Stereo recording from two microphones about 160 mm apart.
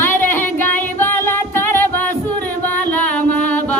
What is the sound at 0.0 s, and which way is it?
Music, 15° left (ahead or behind).